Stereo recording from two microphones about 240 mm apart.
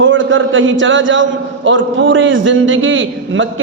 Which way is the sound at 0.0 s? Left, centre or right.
Right.